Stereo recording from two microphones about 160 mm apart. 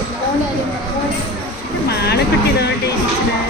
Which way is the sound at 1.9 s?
90° left.